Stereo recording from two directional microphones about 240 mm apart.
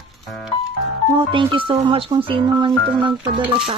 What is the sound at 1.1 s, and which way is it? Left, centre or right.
Speech, centre.